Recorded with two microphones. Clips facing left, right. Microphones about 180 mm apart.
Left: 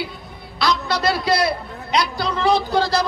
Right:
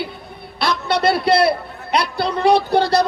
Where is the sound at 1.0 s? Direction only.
60° right (ahead or behind).